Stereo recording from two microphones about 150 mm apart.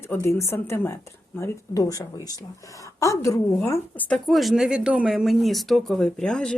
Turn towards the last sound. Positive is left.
turn(degrees=5)  # may be behind; listen again after turning